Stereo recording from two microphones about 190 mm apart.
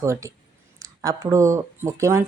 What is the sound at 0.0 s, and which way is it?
Speech, 15° right (ahead or behind).